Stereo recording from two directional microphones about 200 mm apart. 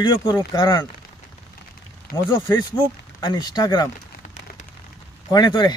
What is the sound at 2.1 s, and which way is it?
Speech, 45° left (ahead or behind).